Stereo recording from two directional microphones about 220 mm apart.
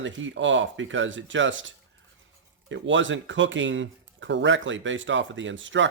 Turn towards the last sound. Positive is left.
turn(degrees=-55)  # may be behind; listen again after turning